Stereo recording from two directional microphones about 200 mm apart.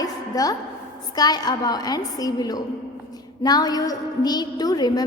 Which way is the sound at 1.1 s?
20° left (ahead or behind).